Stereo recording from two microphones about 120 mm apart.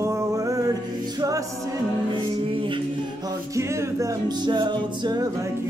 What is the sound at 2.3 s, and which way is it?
A capella, 45° right (ahead or behind).